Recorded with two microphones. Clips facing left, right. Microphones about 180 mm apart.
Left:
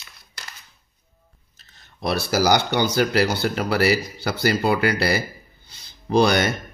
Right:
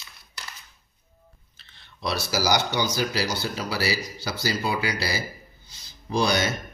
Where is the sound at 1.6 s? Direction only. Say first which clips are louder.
Left 4 dB; 45° left (ahead or behind).